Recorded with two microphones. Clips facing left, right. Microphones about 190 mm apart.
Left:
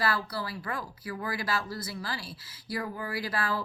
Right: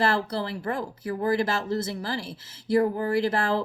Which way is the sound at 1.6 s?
25° right (ahead or behind).